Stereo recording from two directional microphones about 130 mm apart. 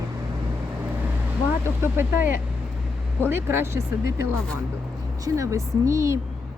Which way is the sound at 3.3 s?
20° right (ahead or behind).